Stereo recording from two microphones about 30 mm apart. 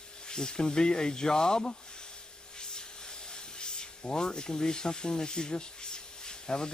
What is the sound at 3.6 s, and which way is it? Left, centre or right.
Speech, left.